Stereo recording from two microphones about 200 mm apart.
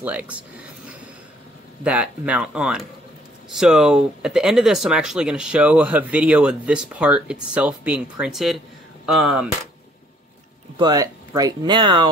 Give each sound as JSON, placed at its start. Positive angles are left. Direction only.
{"t": 0.0, "sound": "speech", "side_deg": -5}
{"t": 10.8, "sound": "speech", "side_deg": -20}